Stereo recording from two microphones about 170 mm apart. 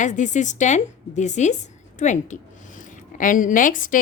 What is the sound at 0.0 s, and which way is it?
A woman's voice, 45° left (ahead or behind).